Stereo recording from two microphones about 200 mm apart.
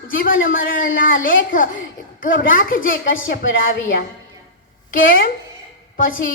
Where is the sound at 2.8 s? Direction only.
75° left (ahead or behind).